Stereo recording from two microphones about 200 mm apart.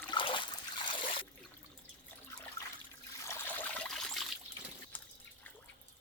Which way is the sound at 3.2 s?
10° left (ahead or behind).